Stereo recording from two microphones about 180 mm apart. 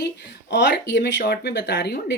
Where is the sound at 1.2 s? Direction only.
65° left (ahead or behind).